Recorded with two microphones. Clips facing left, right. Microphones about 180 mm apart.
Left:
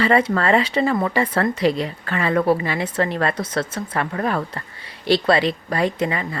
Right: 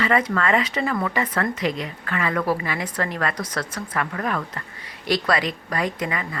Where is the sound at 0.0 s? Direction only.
30° left (ahead or behind).